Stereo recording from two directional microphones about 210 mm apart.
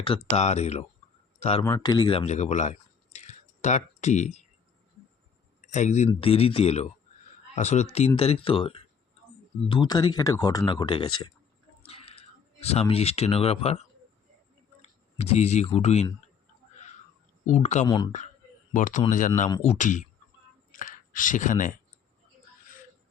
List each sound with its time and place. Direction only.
0.0 s speech: 25° left (ahead or behind)
1.6 s speech: 15° left (ahead or behind); by 4.4 s 35° left (ahead or behind)
5.6 s speech: 35° left (ahead or behind)
11.9 s a sound: 30° left (ahead or behind)
12.9 s speech: 30° left (ahead or behind)
15.2 s speech: 30° left (ahead or behind)
17.4 s speech: 35° left (ahead or behind)
17.8 s speech: 20° left (ahead or behind)
18.7 s speech: 40° left (ahead or behind)
19.5 s speech: 20° left (ahead or behind)
19.7 s speech: 35° left (ahead or behind)